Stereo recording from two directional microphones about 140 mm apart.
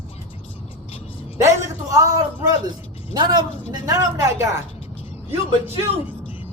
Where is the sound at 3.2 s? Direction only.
30° right (ahead or behind).